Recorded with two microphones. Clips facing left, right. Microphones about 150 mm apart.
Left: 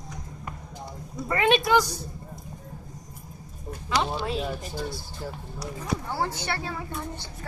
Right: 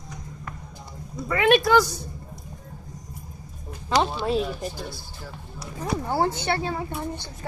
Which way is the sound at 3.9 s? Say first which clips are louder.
Right 4 dB; 40° right (ahead or behind).